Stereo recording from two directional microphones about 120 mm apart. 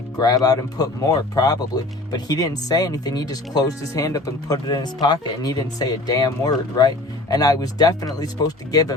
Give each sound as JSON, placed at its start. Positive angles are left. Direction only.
{"t": 0.2, "sound": "speech", "side_deg": 30}